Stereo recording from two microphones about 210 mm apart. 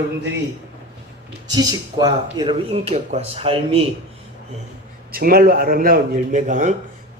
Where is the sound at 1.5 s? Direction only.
20° right (ahead or behind).